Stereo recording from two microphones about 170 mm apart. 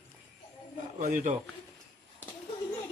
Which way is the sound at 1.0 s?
50° right (ahead or behind).